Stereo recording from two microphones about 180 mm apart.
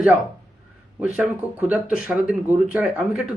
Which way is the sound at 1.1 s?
10° right (ahead or behind).